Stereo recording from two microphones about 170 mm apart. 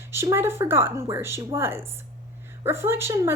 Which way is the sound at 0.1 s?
15° right (ahead or behind).